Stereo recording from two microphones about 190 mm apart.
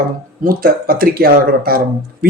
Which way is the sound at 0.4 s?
50° right (ahead or behind).